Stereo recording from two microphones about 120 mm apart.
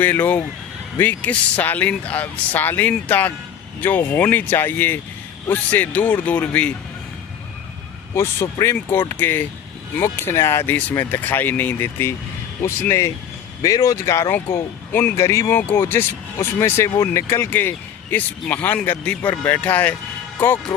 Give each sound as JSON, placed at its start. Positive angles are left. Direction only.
{"t": 0.0, "sound": "speech", "side_deg": 15}
{"t": 8.1, "sound": "speech", "side_deg": 20}